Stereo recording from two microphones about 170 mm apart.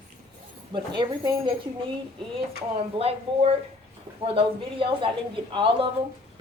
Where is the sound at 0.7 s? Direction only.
25° right (ahead or behind).